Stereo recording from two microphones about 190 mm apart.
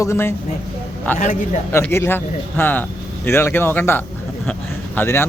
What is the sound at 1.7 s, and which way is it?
Speech, 15° left (ahead or behind).